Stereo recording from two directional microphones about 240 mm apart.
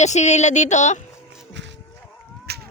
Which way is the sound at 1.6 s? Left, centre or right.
Right.